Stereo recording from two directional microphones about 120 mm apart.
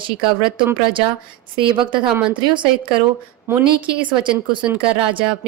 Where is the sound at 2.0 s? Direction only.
10° right (ahead or behind).